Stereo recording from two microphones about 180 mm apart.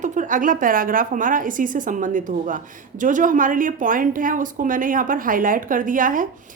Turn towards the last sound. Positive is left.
turn(degrees=-50)  # may be behind; listen again after turning